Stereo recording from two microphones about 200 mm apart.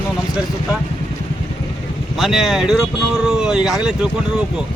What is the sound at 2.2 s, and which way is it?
Speech, centre (ahead or behind).